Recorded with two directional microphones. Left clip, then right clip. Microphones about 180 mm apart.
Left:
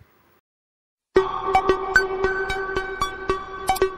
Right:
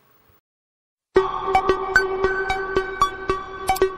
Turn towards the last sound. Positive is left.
turn(degrees=0)  # may be behind; listen again after turning